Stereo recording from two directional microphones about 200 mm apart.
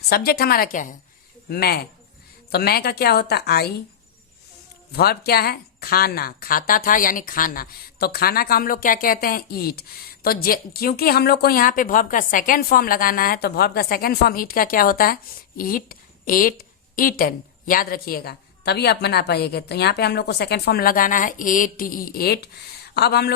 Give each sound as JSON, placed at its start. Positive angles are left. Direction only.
{"t": 0.1, "sound": "speech", "side_deg": 50}
{"t": 4.9, "sound": "speech", "side_deg": 50}